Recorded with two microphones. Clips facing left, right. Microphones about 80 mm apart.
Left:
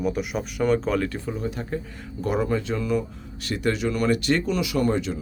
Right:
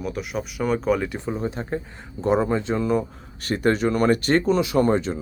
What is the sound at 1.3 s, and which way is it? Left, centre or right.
Speech, right.